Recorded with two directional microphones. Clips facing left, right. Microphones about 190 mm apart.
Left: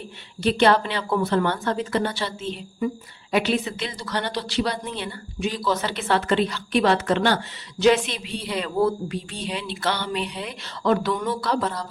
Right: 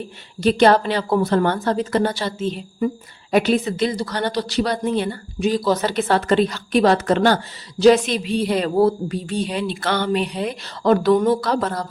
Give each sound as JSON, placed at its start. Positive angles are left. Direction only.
{"t": 0.4, "sound": "a woman's voice", "side_deg": -40}